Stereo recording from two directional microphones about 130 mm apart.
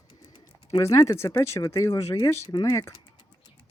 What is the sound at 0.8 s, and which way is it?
Speech, 20° left (ahead or behind).